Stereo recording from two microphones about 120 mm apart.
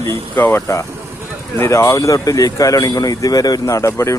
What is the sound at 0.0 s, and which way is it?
Speech, 25° left (ahead or behind).